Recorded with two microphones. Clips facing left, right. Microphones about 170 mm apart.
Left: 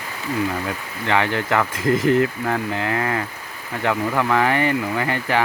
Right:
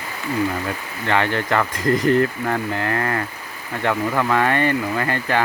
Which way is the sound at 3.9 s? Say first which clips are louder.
Even; centre (ahead or behind).